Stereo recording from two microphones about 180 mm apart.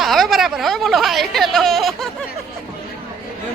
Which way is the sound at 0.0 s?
Centre (ahead or behind).